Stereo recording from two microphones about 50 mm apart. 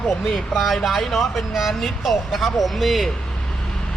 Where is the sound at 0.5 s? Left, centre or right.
Centre.